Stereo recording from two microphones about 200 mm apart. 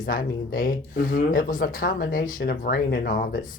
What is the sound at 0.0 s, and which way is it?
Speech, 45° left (ahead or behind).